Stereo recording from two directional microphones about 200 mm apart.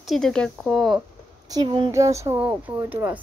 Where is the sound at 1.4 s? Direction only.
20° right (ahead or behind).